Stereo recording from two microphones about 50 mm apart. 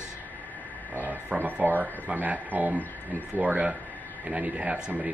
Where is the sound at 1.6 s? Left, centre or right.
Right.